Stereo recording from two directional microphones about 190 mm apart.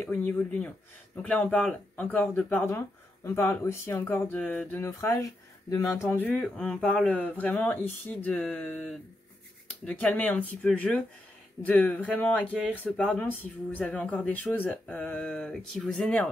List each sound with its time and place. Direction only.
0.0 s speech: 10° left (ahead or behind)